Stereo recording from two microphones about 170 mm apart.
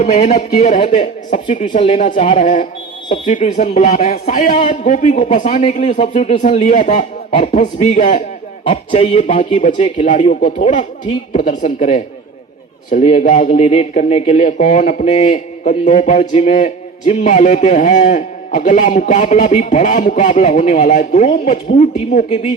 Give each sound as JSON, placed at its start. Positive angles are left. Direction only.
{"t": 0.0, "sound": "speech", "side_deg": 40}
{"t": 1.7, "sound": "a man's voice", "side_deg": 35}
{"t": 8.6, "sound": "speech", "side_deg": 35}
{"t": 10.1, "sound": "a man's voice", "side_deg": 45}